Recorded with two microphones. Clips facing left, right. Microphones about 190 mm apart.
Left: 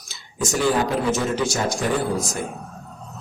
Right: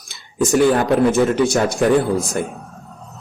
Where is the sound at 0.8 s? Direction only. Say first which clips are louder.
Right 7 dB; 55° right (ahead or behind).